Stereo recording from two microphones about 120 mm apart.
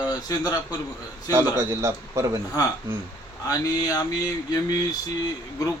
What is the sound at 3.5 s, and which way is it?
Speech, 30° left (ahead or behind).